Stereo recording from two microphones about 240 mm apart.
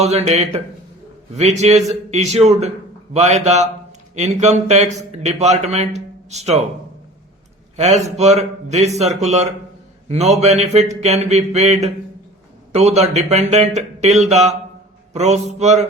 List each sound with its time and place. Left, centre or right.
0.0 s a man's voice: right
7.8 s a man's voice: right
15.1 s mantra: right
15.5 s a man's voice: right